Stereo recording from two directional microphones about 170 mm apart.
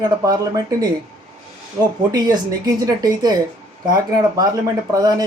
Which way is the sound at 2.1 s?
20° right (ahead or behind).